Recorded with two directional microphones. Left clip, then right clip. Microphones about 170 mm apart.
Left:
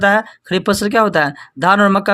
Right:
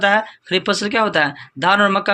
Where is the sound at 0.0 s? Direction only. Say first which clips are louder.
Left 2 dB; 40° left (ahead or behind).